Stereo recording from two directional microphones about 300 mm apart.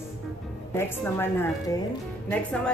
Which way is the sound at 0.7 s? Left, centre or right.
Centre.